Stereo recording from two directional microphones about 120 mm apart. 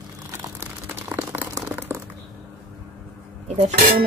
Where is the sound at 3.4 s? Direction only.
65° right (ahead or behind).